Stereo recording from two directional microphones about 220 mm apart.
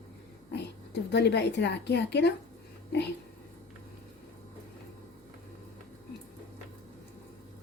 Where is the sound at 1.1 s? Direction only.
50° left (ahead or behind).